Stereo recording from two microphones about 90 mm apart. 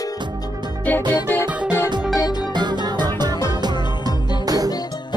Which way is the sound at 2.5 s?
55° right (ahead or behind).